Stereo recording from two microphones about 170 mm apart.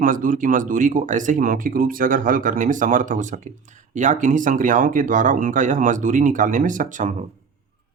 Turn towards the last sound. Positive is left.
turn(degrees=-50)  # may be behind; listen again after turning